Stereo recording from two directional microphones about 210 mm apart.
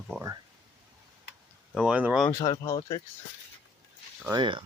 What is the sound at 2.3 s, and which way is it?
Speech, 15° left (ahead or behind).